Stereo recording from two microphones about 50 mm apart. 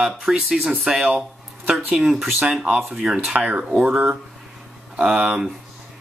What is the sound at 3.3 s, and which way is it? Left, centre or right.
Speech, right.